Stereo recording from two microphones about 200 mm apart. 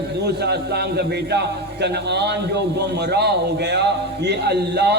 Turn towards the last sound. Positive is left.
turn(degrees=-55)  # may be behind; listen again after turning